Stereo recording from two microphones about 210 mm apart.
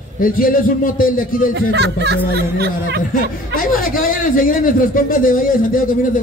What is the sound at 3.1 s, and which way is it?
A man's voice, 40° left (ahead or behind).